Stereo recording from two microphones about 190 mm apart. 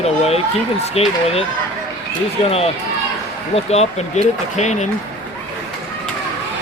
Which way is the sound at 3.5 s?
35° left (ahead or behind).